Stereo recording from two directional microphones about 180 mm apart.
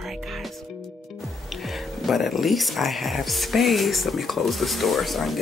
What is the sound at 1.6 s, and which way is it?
Speech, centre (ahead or behind).